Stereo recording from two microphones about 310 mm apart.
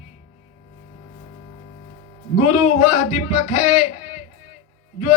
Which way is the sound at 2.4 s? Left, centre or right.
Left.